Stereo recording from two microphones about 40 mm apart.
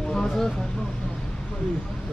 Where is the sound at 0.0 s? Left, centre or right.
Centre.